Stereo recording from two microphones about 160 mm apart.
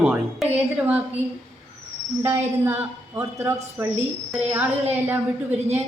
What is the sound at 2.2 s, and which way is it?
A man's voice, 15° right (ahead or behind).